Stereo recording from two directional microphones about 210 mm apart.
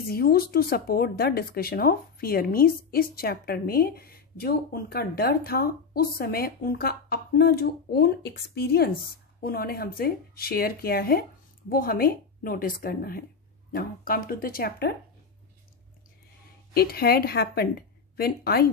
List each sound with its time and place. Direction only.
0.1 s speech: 45° left (ahead or behind)
16.7 s speech: 45° left (ahead or behind)